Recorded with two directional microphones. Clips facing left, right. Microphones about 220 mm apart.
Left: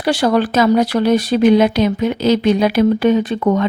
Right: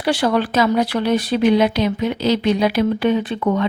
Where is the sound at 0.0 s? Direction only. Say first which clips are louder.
Left 3 dB; 40° left (ahead or behind).